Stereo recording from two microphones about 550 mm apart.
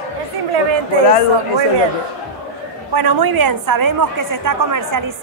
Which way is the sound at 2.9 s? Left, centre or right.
Right.